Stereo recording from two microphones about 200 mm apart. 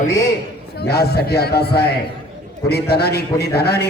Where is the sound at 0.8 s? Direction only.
55° left (ahead or behind).